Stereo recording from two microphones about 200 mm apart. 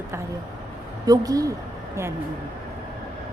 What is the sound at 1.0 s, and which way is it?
Speech, 20° right (ahead or behind).